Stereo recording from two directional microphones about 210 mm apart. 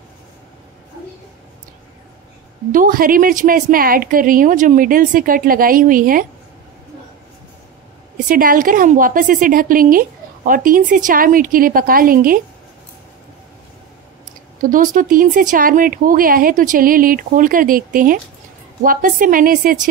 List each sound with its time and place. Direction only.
2.7 s a woman's voice: 40° right (ahead or behind)
8.3 s a woman's voice: 40° right (ahead or behind)
14.6 s a woman's voice: 40° right (ahead or behind)